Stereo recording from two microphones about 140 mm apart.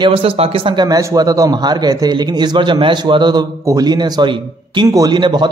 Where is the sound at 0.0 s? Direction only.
40° right (ahead or behind).